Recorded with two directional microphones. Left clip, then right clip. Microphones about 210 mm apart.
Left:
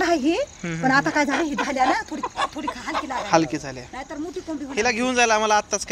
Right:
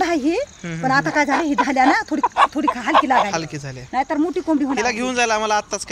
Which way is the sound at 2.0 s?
30° right (ahead or behind).